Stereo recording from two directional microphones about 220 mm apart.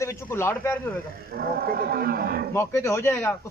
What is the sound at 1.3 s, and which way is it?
A man's voice, 45° right (ahead or behind).